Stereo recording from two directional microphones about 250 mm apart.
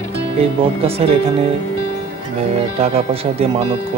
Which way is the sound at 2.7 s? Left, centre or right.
Right.